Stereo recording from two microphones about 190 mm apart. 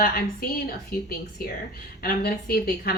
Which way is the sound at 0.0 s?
50° left (ahead or behind).